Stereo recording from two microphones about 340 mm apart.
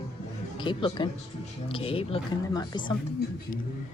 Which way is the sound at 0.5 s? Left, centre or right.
Centre.